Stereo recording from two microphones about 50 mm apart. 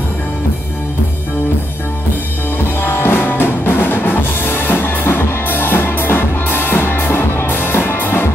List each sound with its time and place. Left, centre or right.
2.8 s music: left